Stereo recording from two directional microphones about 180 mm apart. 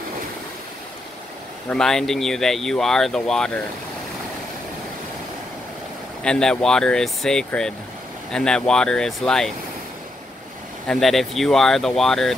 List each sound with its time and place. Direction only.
1.7 s speech: 5° left (ahead or behind)
6.2 s speech: 5° left (ahead or behind)
10.9 s speech: centre (ahead or behind)